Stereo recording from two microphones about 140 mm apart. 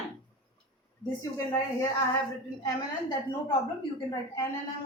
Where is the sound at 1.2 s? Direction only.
25° left (ahead or behind).